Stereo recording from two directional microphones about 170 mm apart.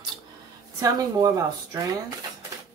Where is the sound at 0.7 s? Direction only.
20° right (ahead or behind).